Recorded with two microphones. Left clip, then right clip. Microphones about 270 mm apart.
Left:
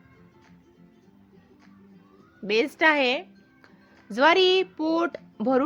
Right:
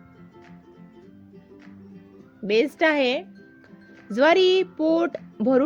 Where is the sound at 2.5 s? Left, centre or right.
Centre.